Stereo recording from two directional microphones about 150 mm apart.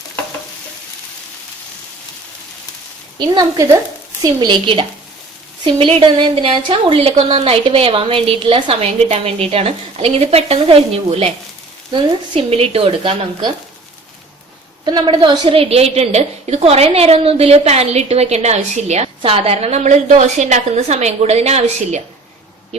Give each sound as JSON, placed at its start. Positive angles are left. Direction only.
{"t": 3.2, "sound": "a woman's voice", "side_deg": -30}
{"t": 14.8, "sound": "a woman's voice", "side_deg": -30}